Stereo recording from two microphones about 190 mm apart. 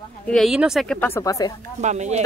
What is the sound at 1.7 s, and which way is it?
Speech, 40° right (ahead or behind).